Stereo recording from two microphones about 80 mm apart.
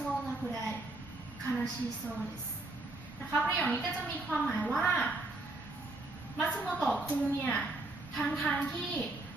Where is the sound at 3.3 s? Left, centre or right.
Centre.